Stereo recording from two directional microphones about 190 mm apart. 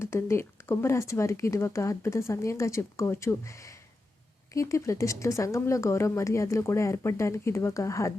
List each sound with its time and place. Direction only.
0.0 s speech: 15° left (ahead or behind)